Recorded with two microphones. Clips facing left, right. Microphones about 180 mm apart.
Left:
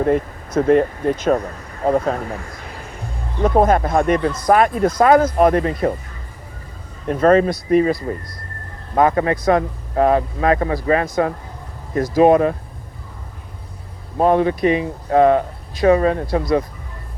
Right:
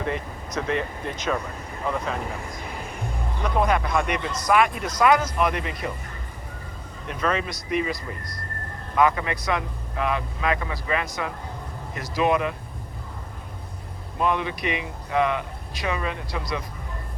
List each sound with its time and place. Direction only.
0.0 s speech: 50° left (ahead or behind)
3.4 s speech: 45° left (ahead or behind)
7.1 s speech: 45° left (ahead or behind)
14.2 s speech: 40° left (ahead or behind)